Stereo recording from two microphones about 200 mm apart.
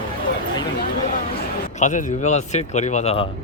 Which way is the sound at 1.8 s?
40° left (ahead or behind).